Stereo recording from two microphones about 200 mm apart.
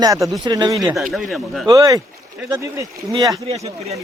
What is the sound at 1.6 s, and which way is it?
Speech, 15° right (ahead or behind).